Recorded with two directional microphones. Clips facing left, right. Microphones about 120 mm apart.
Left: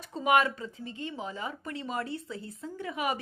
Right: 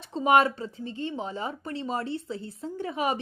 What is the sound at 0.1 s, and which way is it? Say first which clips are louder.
Speech: right 4 dB; 30° right (ahead or behind).